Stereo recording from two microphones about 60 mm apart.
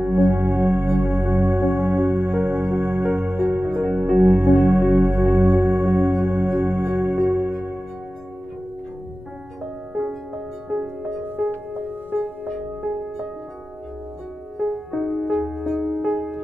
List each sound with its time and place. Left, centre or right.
0.0 s music: right
9.9 s music: centre
14.6 s music: centre